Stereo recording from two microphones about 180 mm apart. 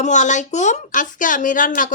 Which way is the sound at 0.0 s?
40° left (ahead or behind).